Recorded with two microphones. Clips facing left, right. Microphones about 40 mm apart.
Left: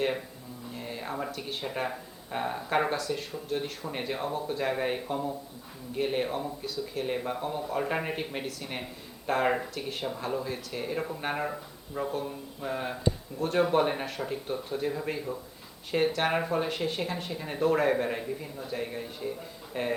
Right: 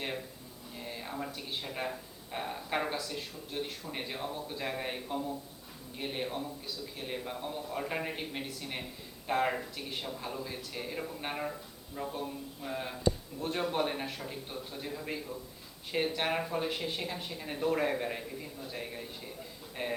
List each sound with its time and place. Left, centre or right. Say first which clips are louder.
0.7 s music: left 4 dB; centre
1.4 s speech: left 5 dB; centre
2.9 s a man's voice: left 6 dB; centre; by 12.1 s left
12.1 s speech: left 4 dB; centre
16.6 s speech: left 4 dB; centre